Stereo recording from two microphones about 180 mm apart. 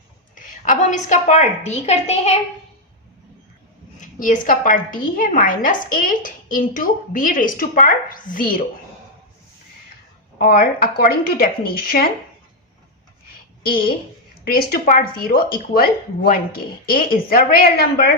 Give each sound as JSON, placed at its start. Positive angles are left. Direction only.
{"t": 0.3, "sound": "a woman's voice", "side_deg": 45}
{"t": 4.0, "sound": "a woman's voice", "side_deg": 45}
{"t": 10.3, "sound": "speech", "side_deg": 55}
{"t": 14.4, "sound": "speech", "side_deg": 55}